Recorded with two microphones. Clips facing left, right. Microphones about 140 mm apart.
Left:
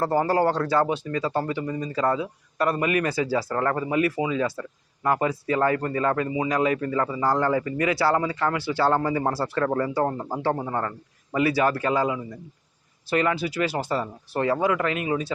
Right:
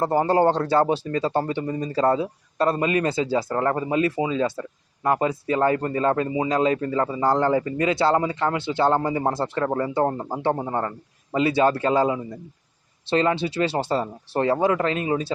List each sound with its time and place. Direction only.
0.0 s speech: 20° right (ahead or behind)